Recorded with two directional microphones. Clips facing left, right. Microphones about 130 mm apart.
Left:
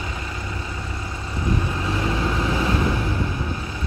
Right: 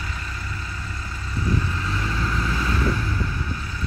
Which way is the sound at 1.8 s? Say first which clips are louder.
Left 4 dB; 25° left (ahead or behind).